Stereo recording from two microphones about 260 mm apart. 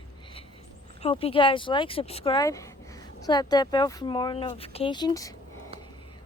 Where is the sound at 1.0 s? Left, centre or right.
Left.